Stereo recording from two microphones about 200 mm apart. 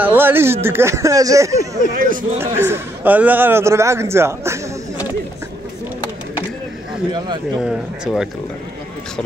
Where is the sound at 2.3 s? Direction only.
10° right (ahead or behind).